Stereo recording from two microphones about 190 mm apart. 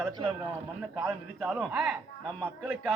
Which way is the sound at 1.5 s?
Centre (ahead or behind).